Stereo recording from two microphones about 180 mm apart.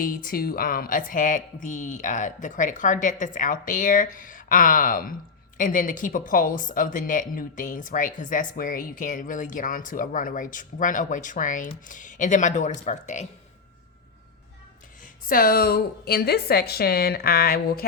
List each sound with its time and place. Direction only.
0.0 s speech: 50° left (ahead or behind)
15.3 s a woman's voice: 55° left (ahead or behind)